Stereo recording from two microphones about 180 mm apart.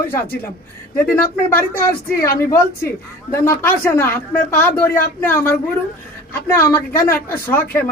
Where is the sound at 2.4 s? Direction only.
15° left (ahead or behind).